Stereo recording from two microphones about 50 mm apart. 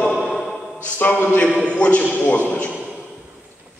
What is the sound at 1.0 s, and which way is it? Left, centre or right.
Speech, left.